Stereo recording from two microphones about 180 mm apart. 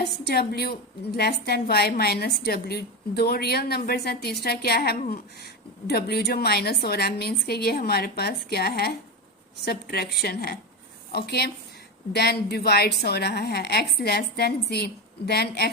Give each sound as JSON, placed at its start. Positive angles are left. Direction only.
{"t": 0.3, "sound": "a woman's voice", "side_deg": 60}